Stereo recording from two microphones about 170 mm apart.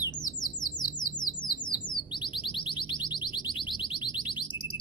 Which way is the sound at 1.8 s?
30° left (ahead or behind).